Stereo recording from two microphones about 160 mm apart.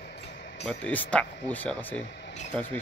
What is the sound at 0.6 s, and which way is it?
Speech, 10° left (ahead or behind).